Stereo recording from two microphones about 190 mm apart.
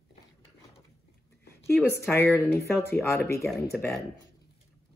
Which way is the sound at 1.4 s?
15° left (ahead or behind).